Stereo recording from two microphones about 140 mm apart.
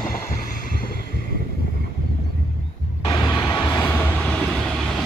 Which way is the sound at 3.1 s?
30° left (ahead or behind).